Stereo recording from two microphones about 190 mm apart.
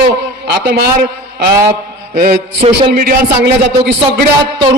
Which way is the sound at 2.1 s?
50° right (ahead or behind).